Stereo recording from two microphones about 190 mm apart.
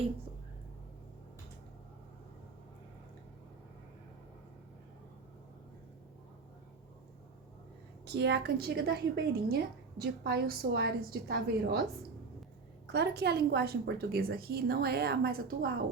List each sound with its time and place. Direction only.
8.0 s a woman's voice: 60° right (ahead or behind)
12.9 s a woman's voice: 60° right (ahead or behind)